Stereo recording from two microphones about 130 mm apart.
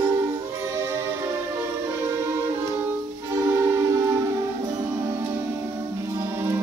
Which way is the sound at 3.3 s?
20° right (ahead or behind).